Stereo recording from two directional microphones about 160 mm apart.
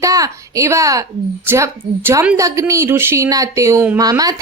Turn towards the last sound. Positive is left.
turn(degrees=-20)  # may be behind; listen again after turning